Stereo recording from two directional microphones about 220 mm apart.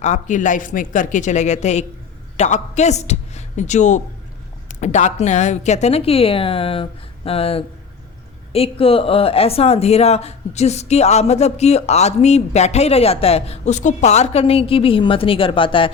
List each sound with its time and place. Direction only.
0.0 s a woman's voice: 35° left (ahead or behind)